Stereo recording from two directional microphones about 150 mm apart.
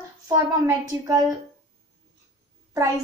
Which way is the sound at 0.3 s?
25° right (ahead or behind).